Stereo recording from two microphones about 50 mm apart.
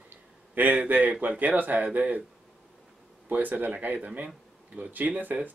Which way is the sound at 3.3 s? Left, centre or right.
Right.